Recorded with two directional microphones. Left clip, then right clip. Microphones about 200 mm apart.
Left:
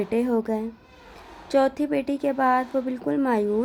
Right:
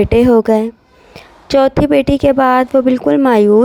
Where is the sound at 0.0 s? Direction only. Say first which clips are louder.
Right 15 dB; 40° right (ahead or behind).